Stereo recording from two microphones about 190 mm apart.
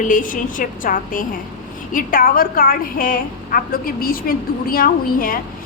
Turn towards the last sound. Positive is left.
turn(degrees=50)  # may be behind; listen again after turning